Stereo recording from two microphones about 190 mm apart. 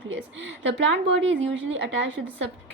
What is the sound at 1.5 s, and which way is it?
Speech, 75° right (ahead or behind).